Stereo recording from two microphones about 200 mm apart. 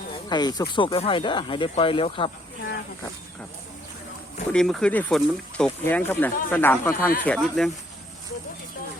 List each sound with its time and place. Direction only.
0.3 s speech: 20° left (ahead or behind)
4.5 s speech: 5° left (ahead or behind)